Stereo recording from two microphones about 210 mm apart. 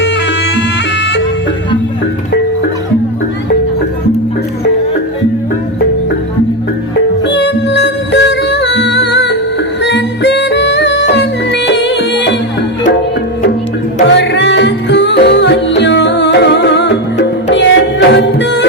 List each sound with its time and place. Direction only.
7.3 s music: 55° left (ahead or behind)
9.8 s yodeling: 55° left (ahead or behind)
14.0 s music: 55° left (ahead or behind)